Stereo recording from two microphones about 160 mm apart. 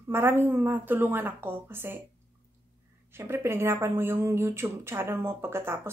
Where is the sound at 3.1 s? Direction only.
15° right (ahead or behind).